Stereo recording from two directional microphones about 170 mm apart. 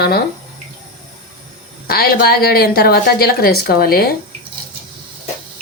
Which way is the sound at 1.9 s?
65° left (ahead or behind).